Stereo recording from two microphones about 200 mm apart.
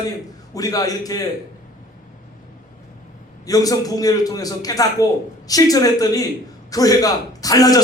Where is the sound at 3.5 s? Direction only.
20° left (ahead or behind).